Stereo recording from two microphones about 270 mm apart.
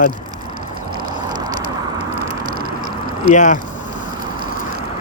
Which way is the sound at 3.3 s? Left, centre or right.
Left.